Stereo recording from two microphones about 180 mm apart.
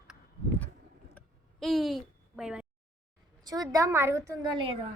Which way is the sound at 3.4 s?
20° right (ahead or behind).